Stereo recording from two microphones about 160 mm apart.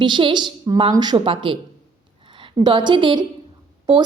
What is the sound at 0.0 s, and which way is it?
A woman's voice, 30° right (ahead or behind).